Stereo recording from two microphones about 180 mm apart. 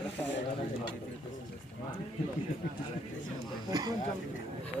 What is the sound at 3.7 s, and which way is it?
Speech, 20° right (ahead or behind).